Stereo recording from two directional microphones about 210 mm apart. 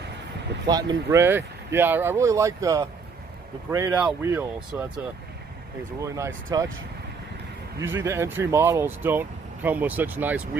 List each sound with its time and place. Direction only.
0.7 s speech: 20° right (ahead or behind)
5.9 s speech: 15° right (ahead or behind)
7.8 s speech: 10° right (ahead or behind)